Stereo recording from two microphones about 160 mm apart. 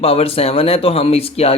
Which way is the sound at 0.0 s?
35° left (ahead or behind).